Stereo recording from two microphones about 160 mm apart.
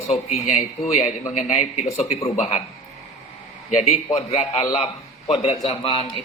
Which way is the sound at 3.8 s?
45° left (ahead or behind).